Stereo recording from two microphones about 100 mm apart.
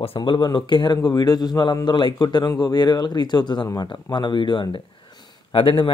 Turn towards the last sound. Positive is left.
turn(degrees=55)  # may be behind; listen again after turning